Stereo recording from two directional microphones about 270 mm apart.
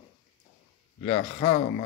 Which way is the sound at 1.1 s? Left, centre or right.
Centre.